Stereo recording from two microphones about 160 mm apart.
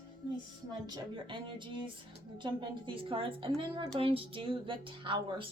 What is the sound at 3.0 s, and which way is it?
A woman's voice, 35° right (ahead or behind).